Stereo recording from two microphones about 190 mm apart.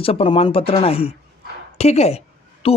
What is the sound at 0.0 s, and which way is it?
A man's voice, 30° left (ahead or behind).